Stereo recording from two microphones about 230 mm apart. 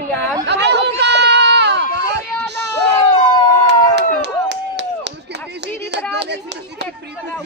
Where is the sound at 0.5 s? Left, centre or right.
Right.